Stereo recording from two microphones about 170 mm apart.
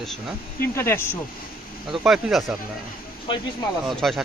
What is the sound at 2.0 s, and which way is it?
Speech, centre (ahead or behind).